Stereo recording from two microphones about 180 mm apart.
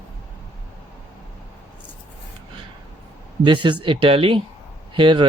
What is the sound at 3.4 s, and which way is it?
Speech, 25° right (ahead or behind).